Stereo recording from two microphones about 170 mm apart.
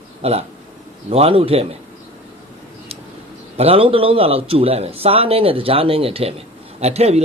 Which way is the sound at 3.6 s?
35° right (ahead or behind).